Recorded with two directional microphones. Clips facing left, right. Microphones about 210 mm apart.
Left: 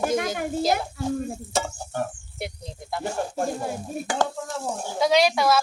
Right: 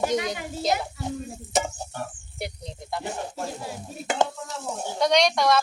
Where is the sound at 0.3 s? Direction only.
55° left (ahead or behind).